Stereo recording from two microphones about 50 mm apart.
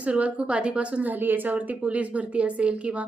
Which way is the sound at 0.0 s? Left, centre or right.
Right.